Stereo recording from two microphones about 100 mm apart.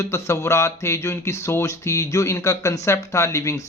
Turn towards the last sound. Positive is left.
turn(degrees=30)  # may be behind; listen again after turning